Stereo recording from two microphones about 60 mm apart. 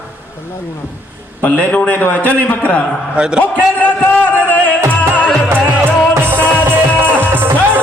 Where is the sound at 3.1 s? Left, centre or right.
Centre.